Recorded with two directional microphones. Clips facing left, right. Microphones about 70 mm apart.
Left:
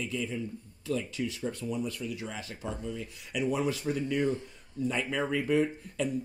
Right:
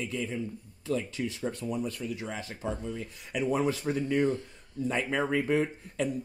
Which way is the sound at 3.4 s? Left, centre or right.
Right.